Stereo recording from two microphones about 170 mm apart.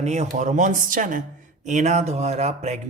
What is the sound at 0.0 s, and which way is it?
Speech, 40° right (ahead or behind).